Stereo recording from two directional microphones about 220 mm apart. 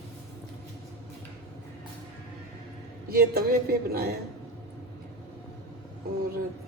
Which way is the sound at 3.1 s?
45° right (ahead or behind).